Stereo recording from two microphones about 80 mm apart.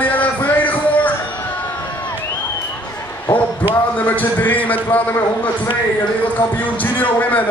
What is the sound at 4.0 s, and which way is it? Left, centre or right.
Speech, left.